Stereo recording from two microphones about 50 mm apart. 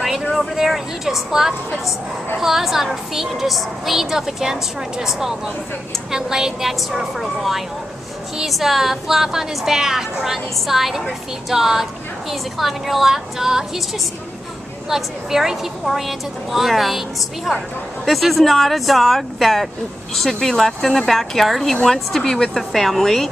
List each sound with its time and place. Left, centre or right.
0.0 s a sound: centre
0.6 s a woman's voice: centre
14.9 s a woman's voice: centre
18.0 s a woman's voice: centre